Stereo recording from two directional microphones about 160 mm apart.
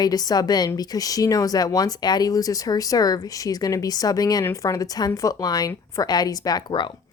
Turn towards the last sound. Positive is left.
turn(degrees=30)  # may be behind; listen again after turning